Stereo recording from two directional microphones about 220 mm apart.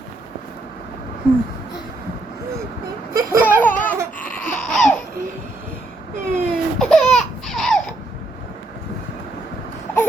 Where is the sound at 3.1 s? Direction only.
10° right (ahead or behind).